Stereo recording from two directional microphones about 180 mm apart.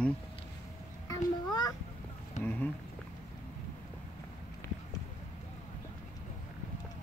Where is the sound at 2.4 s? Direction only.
40° left (ahead or behind).